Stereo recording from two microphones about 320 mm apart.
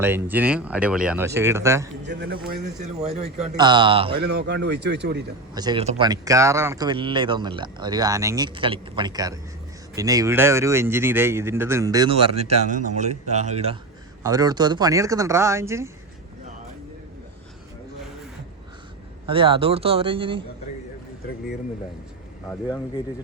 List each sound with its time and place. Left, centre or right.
0.0 s speech: centre
2.0 s speech: right; by 4.2 s centre
4.2 s speech: right
5.5 s speech: centre
19.3 s speech: centre